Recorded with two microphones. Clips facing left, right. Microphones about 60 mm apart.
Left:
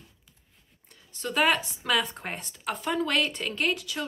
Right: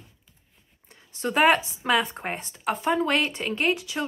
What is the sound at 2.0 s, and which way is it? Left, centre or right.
Speech, centre.